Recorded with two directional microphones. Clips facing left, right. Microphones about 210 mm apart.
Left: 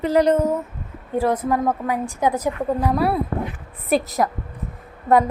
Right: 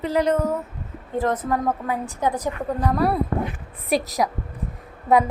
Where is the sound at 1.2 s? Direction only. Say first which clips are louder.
Left 3 dB; 10° left (ahead or behind).